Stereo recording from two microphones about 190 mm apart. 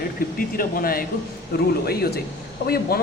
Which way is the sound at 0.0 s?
50° left (ahead or behind).